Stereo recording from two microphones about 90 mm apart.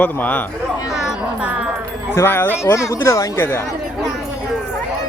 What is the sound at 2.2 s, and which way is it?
Speech, 25° left (ahead or behind).